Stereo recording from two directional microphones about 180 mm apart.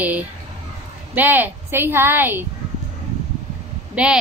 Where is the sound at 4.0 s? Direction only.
5° right (ahead or behind).